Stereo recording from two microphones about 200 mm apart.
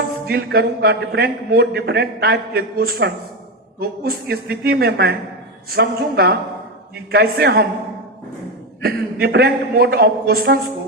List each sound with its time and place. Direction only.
0.3 s a man's voice: 50° right (ahead or behind)
8.8 s a man's voice: 50° right (ahead or behind)